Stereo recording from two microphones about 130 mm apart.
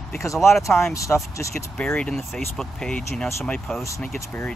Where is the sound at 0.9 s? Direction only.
25° left (ahead or behind).